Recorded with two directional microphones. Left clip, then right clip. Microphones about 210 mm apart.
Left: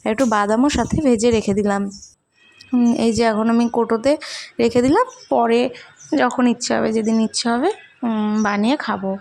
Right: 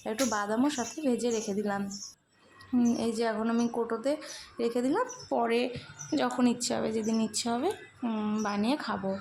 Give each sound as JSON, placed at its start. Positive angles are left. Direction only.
{"t": 0.0, "sound": "speech", "side_deg": 45}
{"t": 5.3, "sound": "speech", "side_deg": 30}